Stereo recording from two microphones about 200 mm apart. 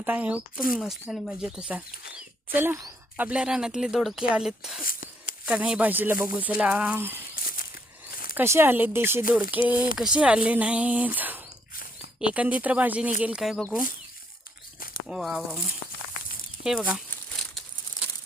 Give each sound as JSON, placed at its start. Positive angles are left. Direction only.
{"t": 0.0, "sound": "speech", "side_deg": -10}
{"t": 4.8, "sound": "a sound", "side_deg": 45}
{"t": 5.5, "sound": "speech", "side_deg": -5}
{"t": 7.3, "sound": "a sound", "side_deg": 45}
{"t": 8.4, "sound": "speech", "side_deg": -10}
{"t": 15.0, "sound": "speech", "side_deg": 0}
{"t": 16.6, "sound": "crumpling", "side_deg": -5}